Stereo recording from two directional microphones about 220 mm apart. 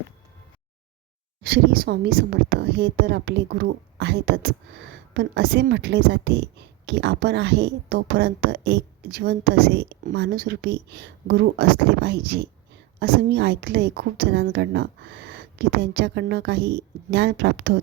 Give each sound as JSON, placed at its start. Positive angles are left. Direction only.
{"t": 1.5, "sound": "a woman's voice", "side_deg": -45}